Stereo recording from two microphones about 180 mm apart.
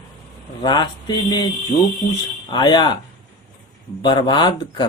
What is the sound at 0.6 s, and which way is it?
Speech, 25° left (ahead or behind).